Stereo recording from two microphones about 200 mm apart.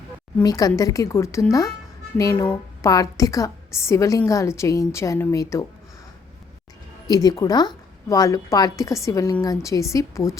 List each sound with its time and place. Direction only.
0.3 s a woman's voice: 15° left (ahead or behind)
7.1 s a woman's voice: 20° left (ahead or behind)